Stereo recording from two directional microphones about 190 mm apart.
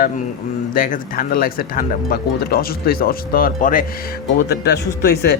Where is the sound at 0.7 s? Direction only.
45° left (ahead or behind).